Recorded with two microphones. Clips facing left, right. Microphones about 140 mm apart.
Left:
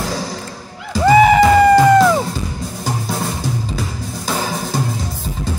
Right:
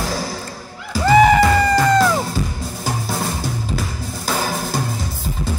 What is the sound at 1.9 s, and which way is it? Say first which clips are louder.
Music: left 4 dB; centre (ahead or behind).